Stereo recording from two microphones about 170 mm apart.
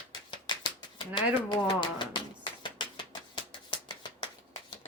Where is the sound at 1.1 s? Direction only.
30° left (ahead or behind).